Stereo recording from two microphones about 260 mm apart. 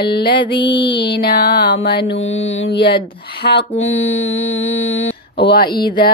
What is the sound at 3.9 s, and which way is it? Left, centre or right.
Mantra, left.